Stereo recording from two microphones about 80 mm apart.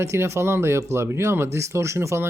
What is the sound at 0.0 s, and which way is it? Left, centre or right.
Speech, right.